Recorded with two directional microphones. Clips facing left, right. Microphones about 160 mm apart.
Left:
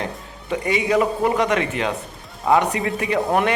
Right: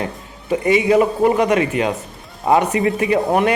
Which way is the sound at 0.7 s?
20° right (ahead or behind).